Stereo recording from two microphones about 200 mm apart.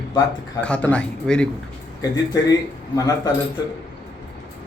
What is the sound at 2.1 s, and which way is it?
Speech, 20° left (ahead or behind).